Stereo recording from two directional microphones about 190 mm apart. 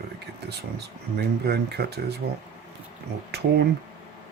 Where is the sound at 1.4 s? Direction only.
60° right (ahead or behind).